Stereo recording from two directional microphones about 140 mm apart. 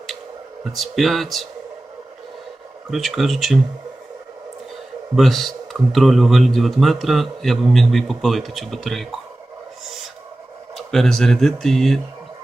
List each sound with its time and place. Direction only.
0.6 s speech: centre (ahead or behind)
2.9 s speech: centre (ahead or behind)
5.1 s speech: centre (ahead or behind)
10.8 s speech: centre (ahead or behind)